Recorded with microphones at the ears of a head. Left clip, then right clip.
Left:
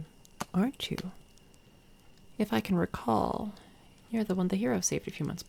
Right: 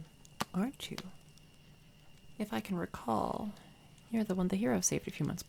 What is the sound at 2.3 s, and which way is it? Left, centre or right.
Speech, left.